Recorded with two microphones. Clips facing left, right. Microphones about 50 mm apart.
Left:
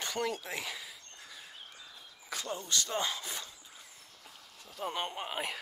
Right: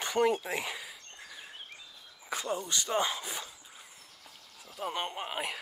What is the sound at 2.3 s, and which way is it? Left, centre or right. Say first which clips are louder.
Speech: right 3 dB; centre.